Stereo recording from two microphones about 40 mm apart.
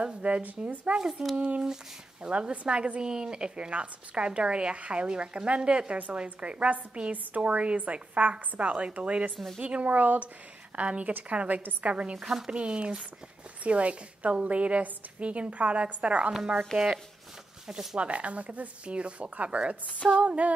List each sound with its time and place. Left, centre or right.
0.0 s a woman's voice: right
10.8 s a woman's voice: right
12.2 s speech: centre
12.4 s a woman's voice: right